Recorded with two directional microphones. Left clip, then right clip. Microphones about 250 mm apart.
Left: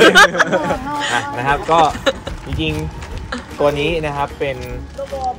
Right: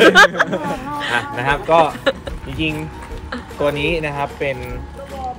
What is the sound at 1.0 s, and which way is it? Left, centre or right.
Speech, centre.